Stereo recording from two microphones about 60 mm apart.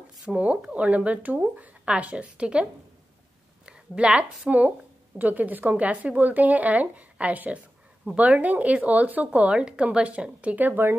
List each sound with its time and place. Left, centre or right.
0.2 s a woman's voice: centre; by 11.0 s right